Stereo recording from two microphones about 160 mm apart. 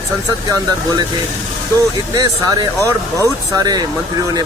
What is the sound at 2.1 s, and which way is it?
Speech, 25° right (ahead or behind).